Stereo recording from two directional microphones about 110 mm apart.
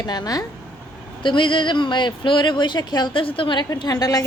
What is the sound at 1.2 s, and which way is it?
A woman's voice, 50° left (ahead or behind).